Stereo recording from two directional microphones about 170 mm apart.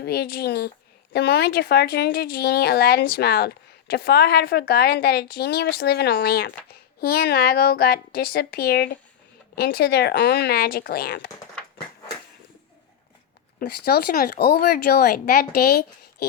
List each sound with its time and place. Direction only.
0.0 s speech: 70° left (ahead or behind)
13.6 s speech: 65° left (ahead or behind)